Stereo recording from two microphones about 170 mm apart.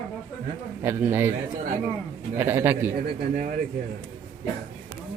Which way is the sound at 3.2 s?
55° right (ahead or behind).